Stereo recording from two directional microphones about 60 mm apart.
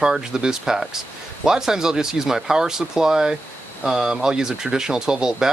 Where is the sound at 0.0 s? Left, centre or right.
Centre.